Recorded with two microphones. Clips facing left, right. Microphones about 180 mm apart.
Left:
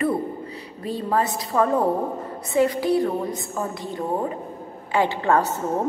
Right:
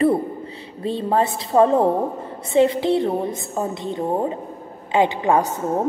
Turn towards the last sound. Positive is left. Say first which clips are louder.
# right 2 dB
turn(degrees=-15)  # may be behind; listen again after turning